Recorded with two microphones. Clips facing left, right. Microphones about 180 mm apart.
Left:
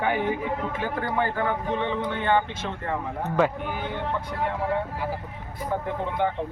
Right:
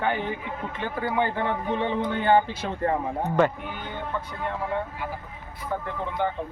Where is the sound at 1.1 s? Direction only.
25° right (ahead or behind).